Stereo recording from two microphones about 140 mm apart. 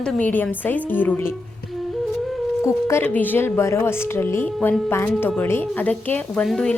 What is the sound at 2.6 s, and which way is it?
Speech, 20° left (ahead or behind).